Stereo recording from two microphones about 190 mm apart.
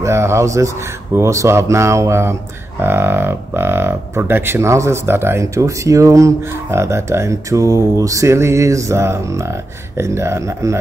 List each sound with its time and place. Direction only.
0.0 s speech: 15° right (ahead or behind)